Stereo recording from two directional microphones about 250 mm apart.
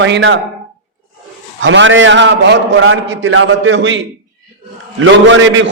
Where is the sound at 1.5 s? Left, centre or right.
Right.